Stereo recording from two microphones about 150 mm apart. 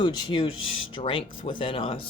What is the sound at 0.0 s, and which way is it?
Speech, 30° left (ahead or behind).